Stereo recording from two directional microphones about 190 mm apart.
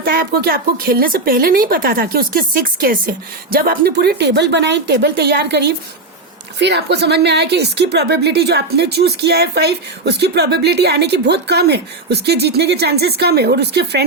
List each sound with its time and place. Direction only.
0.0 s a woman's voice: 50° right (ahead or behind)